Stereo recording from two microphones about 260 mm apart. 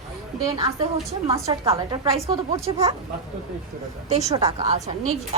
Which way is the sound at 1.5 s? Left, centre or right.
Centre.